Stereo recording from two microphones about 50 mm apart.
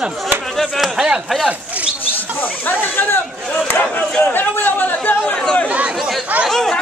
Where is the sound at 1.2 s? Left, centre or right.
Centre.